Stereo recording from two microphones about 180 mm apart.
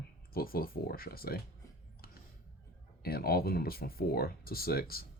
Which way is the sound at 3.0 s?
60° left (ahead or behind).